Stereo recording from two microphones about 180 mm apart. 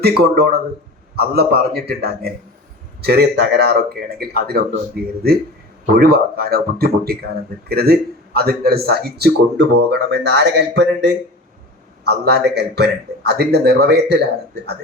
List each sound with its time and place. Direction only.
0.0 s speech: 60° right (ahead or behind)